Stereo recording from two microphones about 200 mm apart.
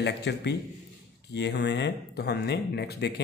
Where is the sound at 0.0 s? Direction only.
60° left (ahead or behind).